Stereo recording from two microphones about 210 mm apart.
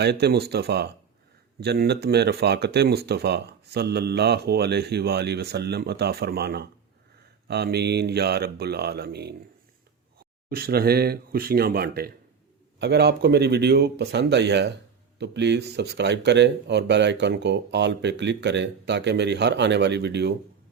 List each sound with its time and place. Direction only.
0.0 s speech: 50° right (ahead or behind)
10.5 s speech: 45° right (ahead or behind)